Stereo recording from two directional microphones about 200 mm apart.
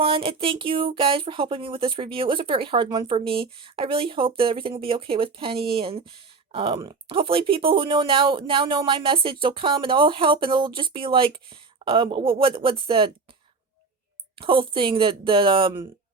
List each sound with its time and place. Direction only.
0.0 s speech: 30° right (ahead or behind)
14.3 s speech: 25° right (ahead or behind)